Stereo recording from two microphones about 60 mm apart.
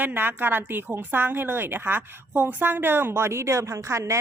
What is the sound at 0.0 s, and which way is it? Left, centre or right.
A woman's voice, right.